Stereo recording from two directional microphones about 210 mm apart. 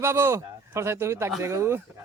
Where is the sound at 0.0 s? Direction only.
10° right (ahead or behind).